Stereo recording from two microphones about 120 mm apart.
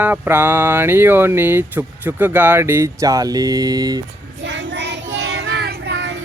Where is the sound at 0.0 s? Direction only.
15° right (ahead or behind); by 4.0 s 30° right (ahead or behind).